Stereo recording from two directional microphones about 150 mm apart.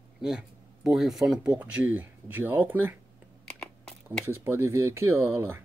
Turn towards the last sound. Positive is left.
turn(degrees=-15)  # may be behind; listen again after turning